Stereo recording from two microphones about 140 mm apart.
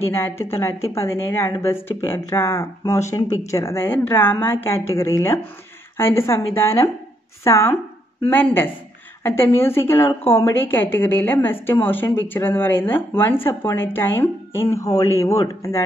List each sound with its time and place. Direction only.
0.0 s a woman's voice: 15° left (ahead or behind)
9.2 s a woman's voice: 15° left (ahead or behind)